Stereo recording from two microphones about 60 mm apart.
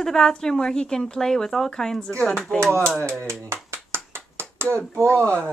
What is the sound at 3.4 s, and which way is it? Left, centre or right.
Clapping, right.